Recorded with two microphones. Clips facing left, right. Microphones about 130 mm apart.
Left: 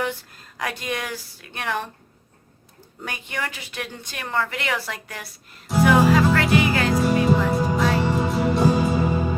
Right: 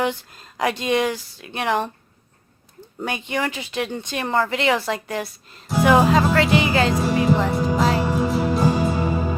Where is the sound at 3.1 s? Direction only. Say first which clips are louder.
Right 6 dB; 25° right (ahead or behind).